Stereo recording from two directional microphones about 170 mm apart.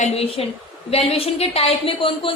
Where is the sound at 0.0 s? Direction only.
35° left (ahead or behind).